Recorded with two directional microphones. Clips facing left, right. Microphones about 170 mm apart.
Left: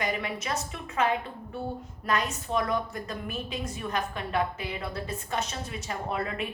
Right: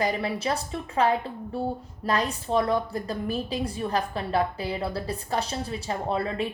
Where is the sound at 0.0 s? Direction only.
35° right (ahead or behind).